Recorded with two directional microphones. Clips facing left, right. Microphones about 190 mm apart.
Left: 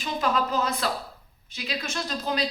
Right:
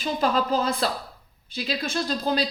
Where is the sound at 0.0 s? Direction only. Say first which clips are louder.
Right 2 dB; 35° right (ahead or behind).